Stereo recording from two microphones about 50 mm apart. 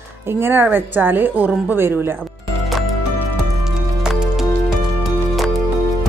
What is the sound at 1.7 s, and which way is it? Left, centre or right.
Speech, right.